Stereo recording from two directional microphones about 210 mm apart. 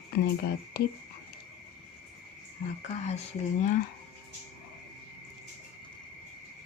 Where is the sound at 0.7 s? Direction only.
45° left (ahead or behind).